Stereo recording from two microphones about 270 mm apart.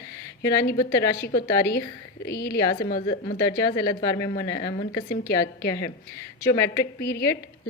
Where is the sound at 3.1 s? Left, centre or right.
Centre.